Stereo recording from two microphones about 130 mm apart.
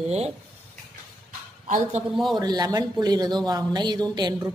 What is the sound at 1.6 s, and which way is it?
Speech, 75° right (ahead or behind).